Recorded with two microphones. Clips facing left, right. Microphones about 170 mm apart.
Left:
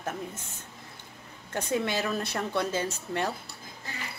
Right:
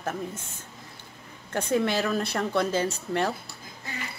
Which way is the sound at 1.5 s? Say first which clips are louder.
Right 4 dB; 15° left (ahead or behind).